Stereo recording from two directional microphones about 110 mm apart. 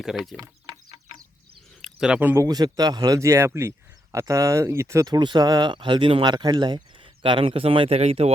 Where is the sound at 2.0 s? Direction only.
10° right (ahead or behind).